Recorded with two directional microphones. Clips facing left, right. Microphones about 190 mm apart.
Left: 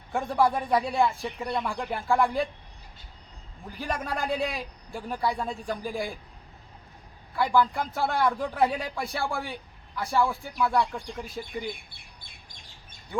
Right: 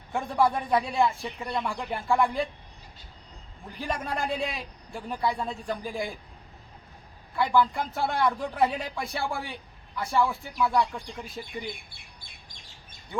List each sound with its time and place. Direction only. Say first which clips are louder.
0.1 s a man's voice: left 1 dB; centre (ahead or behind)
3.8 s a man's voice: even; centre (ahead or behind)
7.3 s a man's voice: even; centre (ahead or behind)